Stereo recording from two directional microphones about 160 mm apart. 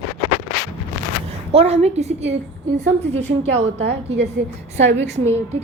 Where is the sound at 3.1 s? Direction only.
40° right (ahead or behind).